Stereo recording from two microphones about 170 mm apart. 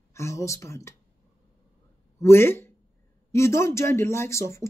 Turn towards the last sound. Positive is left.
turn(degrees=15)  # may be behind; listen again after turning